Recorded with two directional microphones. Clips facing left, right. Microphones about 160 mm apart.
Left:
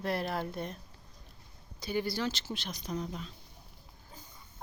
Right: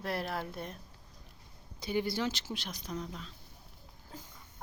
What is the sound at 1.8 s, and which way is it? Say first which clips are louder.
Speech: even; 20° right (ahead or behind).